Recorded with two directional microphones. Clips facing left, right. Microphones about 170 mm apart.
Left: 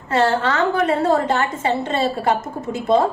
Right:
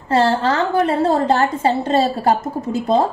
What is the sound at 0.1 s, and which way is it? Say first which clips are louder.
A woman's voice: right 2 dB; 30° right (ahead or behind).